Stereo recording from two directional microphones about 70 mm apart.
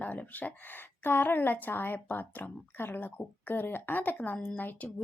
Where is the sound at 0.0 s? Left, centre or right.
Left.